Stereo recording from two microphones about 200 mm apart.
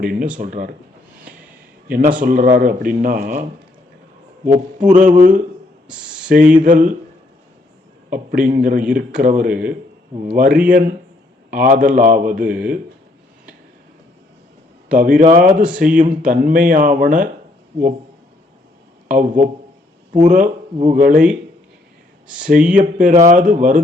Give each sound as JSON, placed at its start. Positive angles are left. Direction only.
{"t": 0.0, "sound": "a man's voice", "side_deg": -45}
{"t": 1.9, "sound": "a man's voice", "side_deg": -45}
{"t": 4.4, "sound": "speech", "side_deg": -40}
{"t": 6.2, "sound": "a sound", "side_deg": -40}
{"t": 6.7, "sound": "speech", "side_deg": -40}
{"t": 8.1, "sound": "a man's voice", "side_deg": -40}
{"t": 14.8, "sound": "a man's voice", "side_deg": -40}
{"t": 20.2, "sound": "speech", "side_deg": -40}
{"t": 22.8, "sound": "speech", "side_deg": -40}